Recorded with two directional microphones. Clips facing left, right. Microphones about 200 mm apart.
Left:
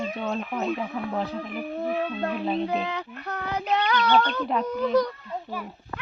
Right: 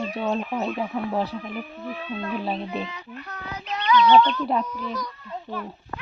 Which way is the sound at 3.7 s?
60° left (ahead or behind).